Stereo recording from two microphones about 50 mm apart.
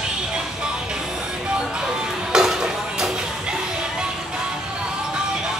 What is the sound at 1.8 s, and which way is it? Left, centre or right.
Music, centre.